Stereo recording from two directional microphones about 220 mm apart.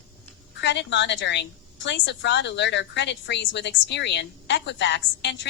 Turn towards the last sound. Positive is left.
turn(degrees=55)  # may be behind; listen again after turning